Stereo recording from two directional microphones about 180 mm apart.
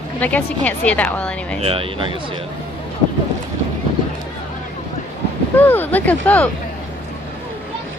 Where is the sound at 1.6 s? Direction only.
30° right (ahead or behind).